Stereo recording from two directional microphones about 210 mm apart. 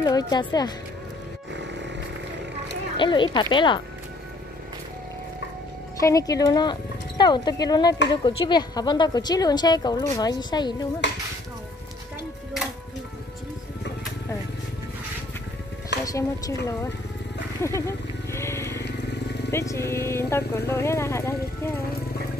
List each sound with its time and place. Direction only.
0.0 s a woman's voice: 20° left (ahead or behind)
1.5 s music: 55° right (ahead or behind)
3.0 s a woman's voice: 20° left (ahead or behind)
5.9 s a woman's voice: 15° left (ahead or behind)
16.1 s speech: 15° left (ahead or behind)
17.6 s vehicle: 15° left (ahead or behind)
19.5 s speech: 15° left (ahead or behind)